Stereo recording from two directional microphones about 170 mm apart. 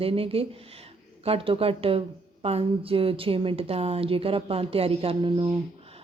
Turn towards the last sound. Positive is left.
turn(degrees=-30)  # may be behind; listen again after turning